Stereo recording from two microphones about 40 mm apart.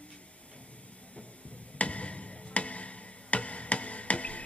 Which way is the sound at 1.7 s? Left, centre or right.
Left.